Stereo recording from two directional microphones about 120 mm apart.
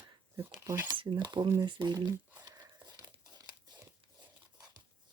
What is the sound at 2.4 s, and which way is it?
Crumpling, 35° right (ahead or behind).